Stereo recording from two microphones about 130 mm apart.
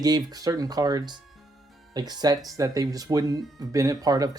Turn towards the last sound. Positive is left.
turn(degrees=-30)  # may be behind; listen again after turning